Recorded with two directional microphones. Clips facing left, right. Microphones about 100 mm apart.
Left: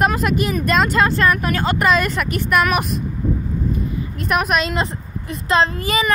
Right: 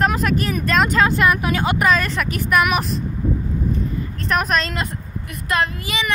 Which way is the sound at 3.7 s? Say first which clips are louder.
Left 1 dB; 10° left (ahead or behind).